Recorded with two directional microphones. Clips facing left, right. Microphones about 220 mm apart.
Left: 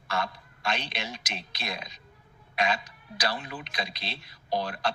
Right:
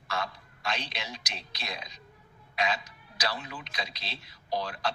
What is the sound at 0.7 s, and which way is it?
A man's voice, 55° left (ahead or behind).